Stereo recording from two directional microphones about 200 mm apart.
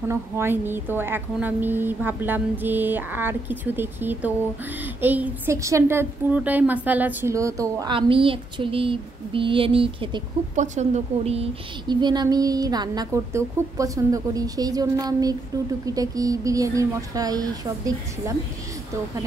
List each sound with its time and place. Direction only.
0.1 s a woman's voice: 10° right (ahead or behind)